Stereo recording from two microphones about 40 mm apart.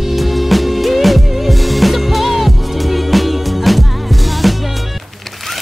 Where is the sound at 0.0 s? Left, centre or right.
Centre.